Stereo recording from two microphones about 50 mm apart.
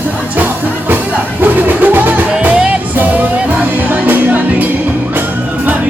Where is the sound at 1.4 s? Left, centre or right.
Right.